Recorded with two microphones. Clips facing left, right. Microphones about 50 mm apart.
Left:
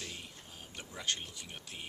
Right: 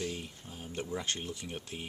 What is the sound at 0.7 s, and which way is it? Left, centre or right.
Speech, right.